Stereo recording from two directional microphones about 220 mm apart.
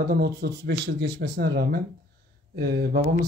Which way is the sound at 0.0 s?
45° right (ahead or behind).